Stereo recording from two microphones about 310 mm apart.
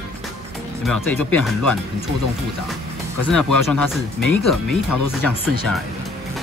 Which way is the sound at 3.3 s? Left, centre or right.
Centre.